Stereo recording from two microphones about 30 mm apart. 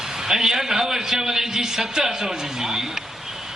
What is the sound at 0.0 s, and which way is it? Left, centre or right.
A man's voice, centre.